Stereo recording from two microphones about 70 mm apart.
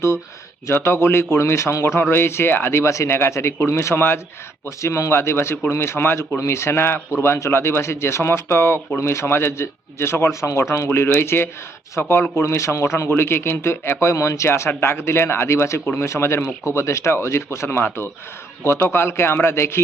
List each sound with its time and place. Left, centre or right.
0.7 s a man's voice: left
10.8 s a man's voice: left